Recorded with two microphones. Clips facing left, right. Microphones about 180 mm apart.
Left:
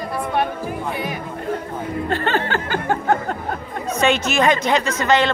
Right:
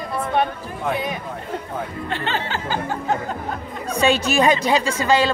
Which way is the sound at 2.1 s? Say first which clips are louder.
Left 5 dB; 50° left (ahead or behind).